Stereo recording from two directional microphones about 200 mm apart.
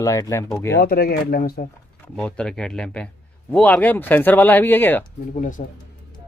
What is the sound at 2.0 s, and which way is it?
A man's voice, 5° left (ahead or behind).